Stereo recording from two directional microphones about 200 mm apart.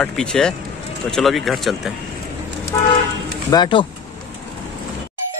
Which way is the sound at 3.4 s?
20° left (ahead or behind).